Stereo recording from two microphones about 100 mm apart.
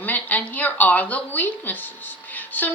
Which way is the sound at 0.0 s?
15° left (ahead or behind).